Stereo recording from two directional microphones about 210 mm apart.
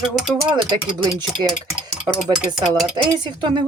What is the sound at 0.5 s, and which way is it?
Speech, 20° right (ahead or behind).